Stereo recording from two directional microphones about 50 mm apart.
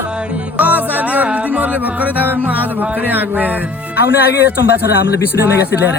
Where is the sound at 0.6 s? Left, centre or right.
Right.